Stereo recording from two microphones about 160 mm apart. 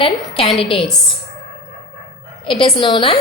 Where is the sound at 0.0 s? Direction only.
35° left (ahead or behind).